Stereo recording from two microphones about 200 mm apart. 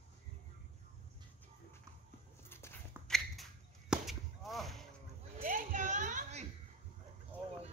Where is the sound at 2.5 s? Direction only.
5° left (ahead or behind).